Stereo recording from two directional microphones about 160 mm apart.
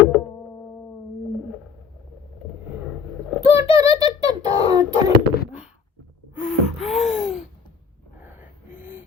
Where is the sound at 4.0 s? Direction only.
25° right (ahead or behind).